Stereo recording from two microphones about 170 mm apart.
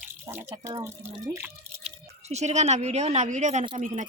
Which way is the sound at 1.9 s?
40° right (ahead or behind).